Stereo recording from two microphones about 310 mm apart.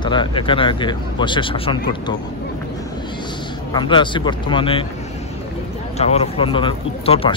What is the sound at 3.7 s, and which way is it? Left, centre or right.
A man's voice, centre.